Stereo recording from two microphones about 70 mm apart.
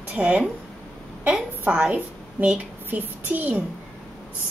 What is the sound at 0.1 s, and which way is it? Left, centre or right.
A woman's voice, centre.